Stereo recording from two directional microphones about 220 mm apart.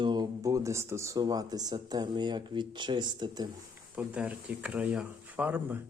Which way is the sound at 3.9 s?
5° right (ahead or behind).